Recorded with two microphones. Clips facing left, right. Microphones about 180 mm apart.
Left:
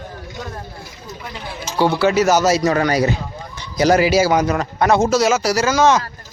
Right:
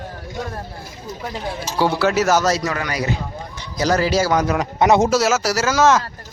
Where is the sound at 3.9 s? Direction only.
10° left (ahead or behind).